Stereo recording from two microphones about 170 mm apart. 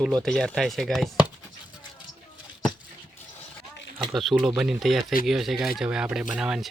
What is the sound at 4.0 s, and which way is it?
Speech, centre (ahead or behind).